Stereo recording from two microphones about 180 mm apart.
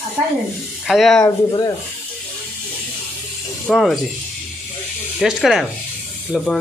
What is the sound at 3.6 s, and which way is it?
Speech, centre (ahead or behind).